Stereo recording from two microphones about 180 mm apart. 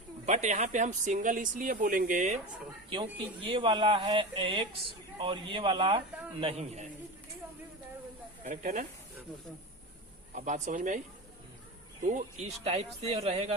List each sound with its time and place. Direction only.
0.3 s speech: 40° right (ahead or behind)
2.9 s speech: 25° right (ahead or behind)
8.4 s speech: 50° right (ahead or behind)
10.3 s speech: 45° right (ahead or behind)
12.0 s speech: 40° right (ahead or behind)